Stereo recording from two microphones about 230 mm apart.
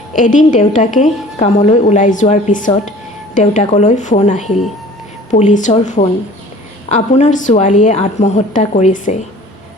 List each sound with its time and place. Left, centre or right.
0.2 s a woman's voice: left